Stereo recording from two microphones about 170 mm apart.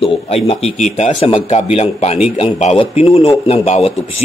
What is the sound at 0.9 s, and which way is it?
A man's voice, 40° left (ahead or behind).